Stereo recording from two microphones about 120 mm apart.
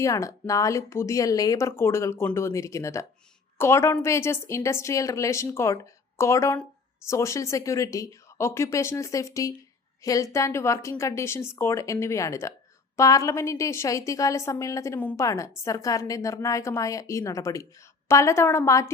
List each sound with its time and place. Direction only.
0.0 s a woman's voice: 25° left (ahead or behind)
14.9 s a woman's voice: 15° left (ahead or behind)
15.2 s a woman's voice: 25° left (ahead or behind)